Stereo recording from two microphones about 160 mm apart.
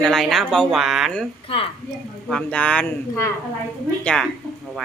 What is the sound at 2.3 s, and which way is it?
Speech, 5° left (ahead or behind).